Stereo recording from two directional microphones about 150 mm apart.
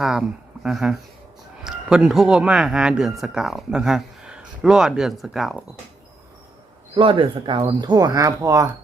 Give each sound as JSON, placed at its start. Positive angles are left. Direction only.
{"t": 0.0, "sound": "speech", "side_deg": -5}
{"t": 6.9, "sound": "speech", "side_deg": -35}